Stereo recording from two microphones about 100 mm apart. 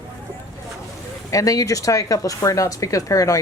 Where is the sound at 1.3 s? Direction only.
35° left (ahead or behind).